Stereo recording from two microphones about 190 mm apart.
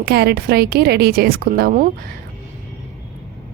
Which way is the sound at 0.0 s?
60° right (ahead or behind).